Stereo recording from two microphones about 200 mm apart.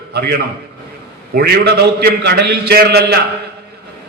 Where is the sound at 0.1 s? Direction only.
50° right (ahead or behind).